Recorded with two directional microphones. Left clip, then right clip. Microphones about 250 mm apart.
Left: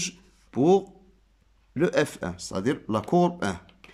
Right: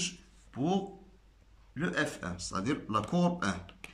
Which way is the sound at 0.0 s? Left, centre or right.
Left.